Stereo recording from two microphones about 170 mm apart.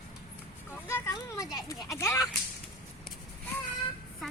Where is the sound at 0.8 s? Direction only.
15° left (ahead or behind).